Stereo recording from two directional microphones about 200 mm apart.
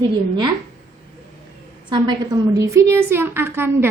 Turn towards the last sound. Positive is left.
turn(degrees=-10)  # may be behind; listen again after turning